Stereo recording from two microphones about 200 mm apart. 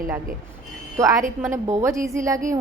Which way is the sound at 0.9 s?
15° right (ahead or behind).